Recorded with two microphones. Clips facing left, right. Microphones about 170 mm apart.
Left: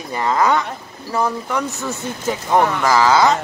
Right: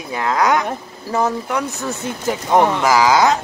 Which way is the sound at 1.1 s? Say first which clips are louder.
Right 2 dB; 10° right (ahead or behind).